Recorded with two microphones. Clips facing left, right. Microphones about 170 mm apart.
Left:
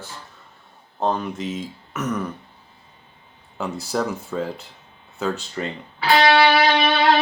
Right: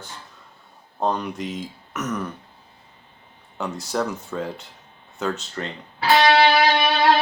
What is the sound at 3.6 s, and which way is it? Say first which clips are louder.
Speech: left 1 dB; 5° left (ahead or behind).